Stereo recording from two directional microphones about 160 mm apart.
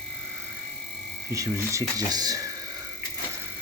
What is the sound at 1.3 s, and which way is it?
Speech, 20° right (ahead or behind).